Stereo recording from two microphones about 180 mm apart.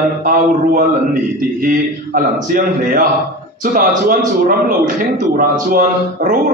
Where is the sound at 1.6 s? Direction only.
50° right (ahead or behind).